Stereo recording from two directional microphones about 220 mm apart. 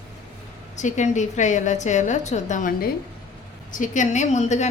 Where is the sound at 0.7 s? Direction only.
35° left (ahead or behind).